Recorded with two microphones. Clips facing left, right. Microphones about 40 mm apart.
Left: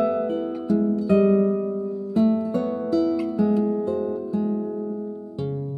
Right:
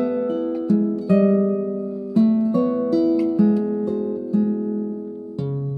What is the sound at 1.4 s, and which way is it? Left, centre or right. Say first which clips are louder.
Music: right 1 dB; left.